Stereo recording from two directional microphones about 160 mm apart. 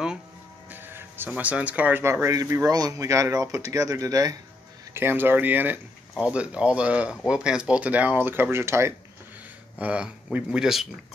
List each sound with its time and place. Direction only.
0.7 s speech: 10° right (ahead or behind)